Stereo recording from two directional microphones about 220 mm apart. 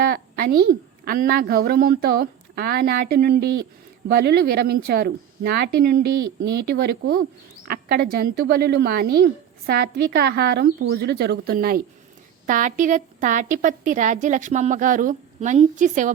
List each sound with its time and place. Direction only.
0.0 s a woman's voice: 45° right (ahead or behind)